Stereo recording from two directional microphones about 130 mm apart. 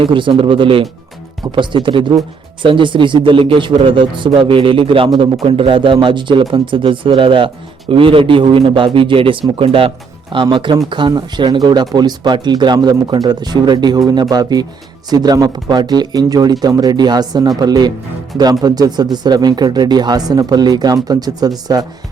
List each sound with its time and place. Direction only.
0.0 s a man's voice: 40° right (ahead or behind)